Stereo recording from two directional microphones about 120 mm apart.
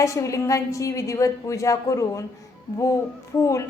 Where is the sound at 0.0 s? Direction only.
25° left (ahead or behind).